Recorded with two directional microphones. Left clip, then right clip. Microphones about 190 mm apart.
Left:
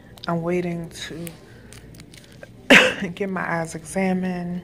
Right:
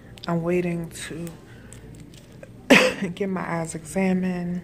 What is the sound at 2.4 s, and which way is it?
A woman's voice, 10° right (ahead or behind).